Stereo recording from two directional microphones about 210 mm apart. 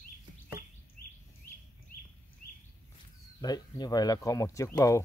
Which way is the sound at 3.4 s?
20° left (ahead or behind).